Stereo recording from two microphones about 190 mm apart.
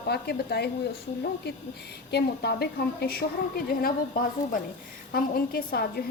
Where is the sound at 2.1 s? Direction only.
60° left (ahead or behind).